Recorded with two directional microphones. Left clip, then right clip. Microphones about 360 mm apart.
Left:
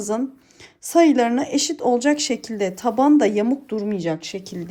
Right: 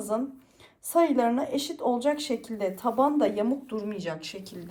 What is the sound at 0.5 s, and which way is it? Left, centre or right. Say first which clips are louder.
Speech: left 7 dB; left.